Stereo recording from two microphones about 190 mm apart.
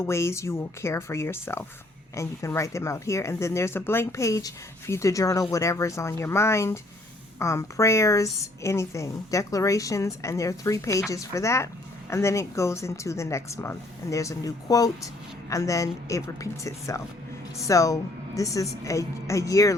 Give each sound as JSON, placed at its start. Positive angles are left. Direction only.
{"t": 0.0, "sound": "a woman's voice", "side_deg": 15}